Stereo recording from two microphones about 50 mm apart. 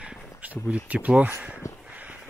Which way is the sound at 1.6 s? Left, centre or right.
Left.